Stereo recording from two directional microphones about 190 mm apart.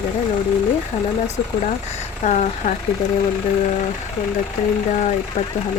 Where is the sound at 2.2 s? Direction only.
40° left (ahead or behind).